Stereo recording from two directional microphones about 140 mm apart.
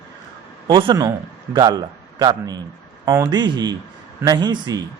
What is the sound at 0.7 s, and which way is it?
A man's voice, 35° right (ahead or behind).